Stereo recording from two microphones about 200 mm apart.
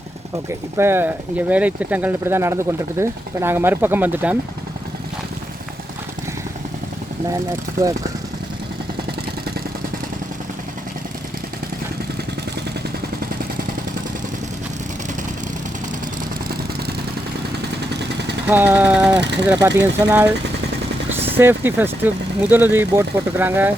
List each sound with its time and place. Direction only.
0.8 s speech: 10° right (ahead or behind)
18.4 s speech: 10° right (ahead or behind)
19.2 s speech: 60° right (ahead or behind)
19.6 s speech: 20° right (ahead or behind)
21.3 s speech: 10° right (ahead or behind)